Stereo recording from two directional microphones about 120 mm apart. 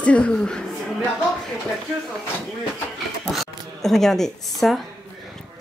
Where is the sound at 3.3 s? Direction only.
Centre (ahead or behind).